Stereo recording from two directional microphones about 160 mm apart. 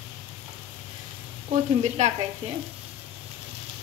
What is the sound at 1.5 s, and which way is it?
Speech, 45° right (ahead or behind).